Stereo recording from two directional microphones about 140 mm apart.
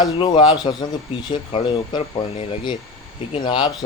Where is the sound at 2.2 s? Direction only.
45° left (ahead or behind).